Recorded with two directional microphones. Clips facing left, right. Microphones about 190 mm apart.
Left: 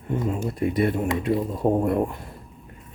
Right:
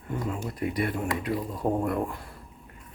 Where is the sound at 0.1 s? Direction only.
25° left (ahead or behind).